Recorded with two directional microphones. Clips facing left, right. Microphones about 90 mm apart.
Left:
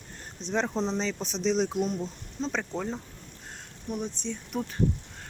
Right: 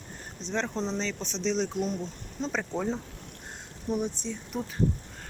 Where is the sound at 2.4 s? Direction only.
5° right (ahead or behind).